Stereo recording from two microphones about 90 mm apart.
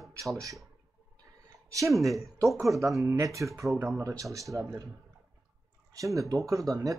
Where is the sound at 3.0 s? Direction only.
35° right (ahead or behind).